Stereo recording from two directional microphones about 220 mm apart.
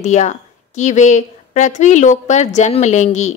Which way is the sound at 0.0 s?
30° left (ahead or behind).